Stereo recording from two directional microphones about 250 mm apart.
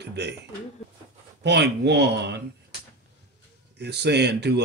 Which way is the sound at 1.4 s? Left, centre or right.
Right.